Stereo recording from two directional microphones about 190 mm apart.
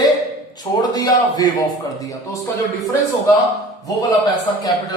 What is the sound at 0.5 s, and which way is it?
A man's voice, 20° left (ahead or behind).